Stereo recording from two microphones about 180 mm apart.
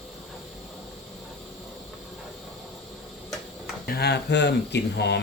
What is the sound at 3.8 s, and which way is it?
Speech, 60° left (ahead or behind).